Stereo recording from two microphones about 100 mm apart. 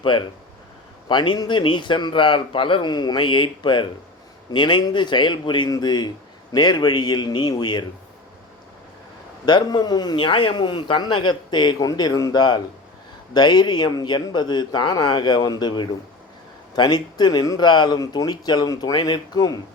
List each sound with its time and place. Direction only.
0.0 s a man's voice: 55° left (ahead or behind)
9.5 s a man's voice: 45° left (ahead or behind)